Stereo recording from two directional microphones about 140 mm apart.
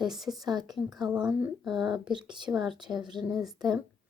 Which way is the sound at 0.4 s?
30° right (ahead or behind).